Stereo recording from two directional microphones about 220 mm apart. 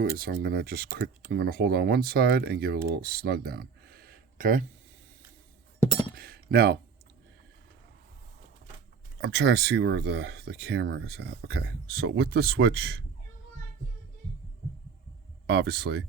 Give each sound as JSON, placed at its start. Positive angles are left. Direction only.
{"t": 0.0, "sound": "speech", "side_deg": -40}
{"t": 5.8, "sound": "chink", "side_deg": 20}
{"t": 6.1, "sound": "chink", "side_deg": -45}
{"t": 9.2, "sound": "speech", "side_deg": -50}
{"t": 15.4, "sound": "speech", "side_deg": -50}